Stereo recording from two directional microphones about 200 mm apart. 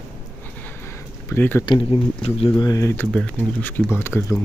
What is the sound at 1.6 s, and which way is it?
Speech, 25° left (ahead or behind).